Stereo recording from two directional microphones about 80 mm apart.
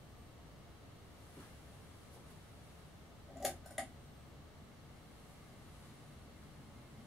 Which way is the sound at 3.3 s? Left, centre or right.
Centre.